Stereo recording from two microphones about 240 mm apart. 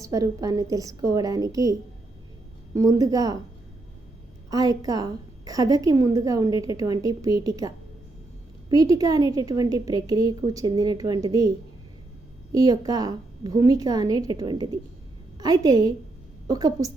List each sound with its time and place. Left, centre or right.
0.0 s a woman's voice: centre
2.7 s a woman's voice: centre
4.5 s a woman's voice: centre
8.7 s a woman's voice: centre